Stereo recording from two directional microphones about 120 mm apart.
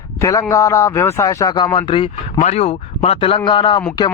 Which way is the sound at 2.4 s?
65° left (ahead or behind).